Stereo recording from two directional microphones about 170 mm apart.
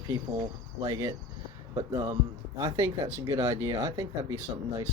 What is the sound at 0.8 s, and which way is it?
Speech, 20° right (ahead or behind).